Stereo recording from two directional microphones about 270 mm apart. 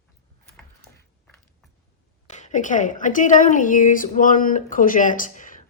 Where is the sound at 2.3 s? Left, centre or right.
Left.